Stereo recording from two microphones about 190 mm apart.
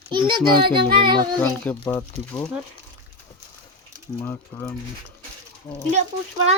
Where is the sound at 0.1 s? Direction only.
25° right (ahead or behind).